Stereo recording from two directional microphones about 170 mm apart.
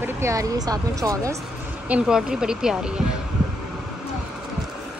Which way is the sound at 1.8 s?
5° right (ahead or behind).